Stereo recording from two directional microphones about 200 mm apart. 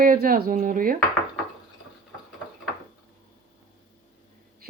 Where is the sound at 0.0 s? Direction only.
45° right (ahead or behind).